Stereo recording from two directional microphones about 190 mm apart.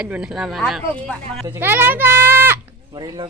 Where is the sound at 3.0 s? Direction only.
25° right (ahead or behind).